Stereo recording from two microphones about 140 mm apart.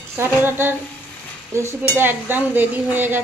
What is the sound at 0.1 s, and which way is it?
Dishes, 15° right (ahead or behind).